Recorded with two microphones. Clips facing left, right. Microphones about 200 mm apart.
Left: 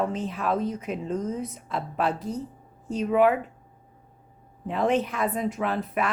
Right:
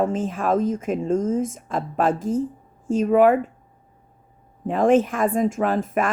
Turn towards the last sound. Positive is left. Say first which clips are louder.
# right 5 dB
turn(degrees=-45)  # may be behind; listen again after turning